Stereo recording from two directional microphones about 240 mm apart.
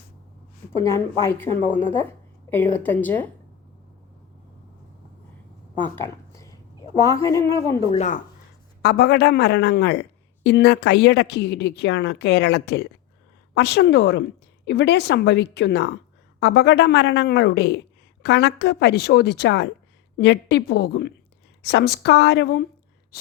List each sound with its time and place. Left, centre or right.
0.8 s a woman's voice: centre
6.3 s a sound: centre
7.0 s a woman's voice: centre
7.9 s speech: left
8.8 s a man's voice: left